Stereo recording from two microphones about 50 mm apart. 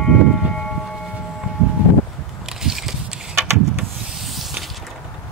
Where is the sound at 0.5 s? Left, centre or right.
Centre.